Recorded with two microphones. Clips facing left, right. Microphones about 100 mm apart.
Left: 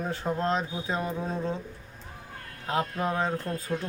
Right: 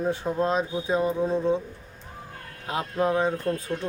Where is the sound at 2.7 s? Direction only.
15° right (ahead or behind).